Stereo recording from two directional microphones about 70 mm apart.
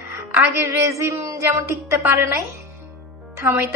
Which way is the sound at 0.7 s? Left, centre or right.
Right.